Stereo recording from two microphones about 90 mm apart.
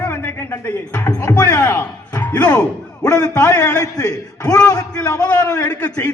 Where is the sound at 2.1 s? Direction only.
15° left (ahead or behind).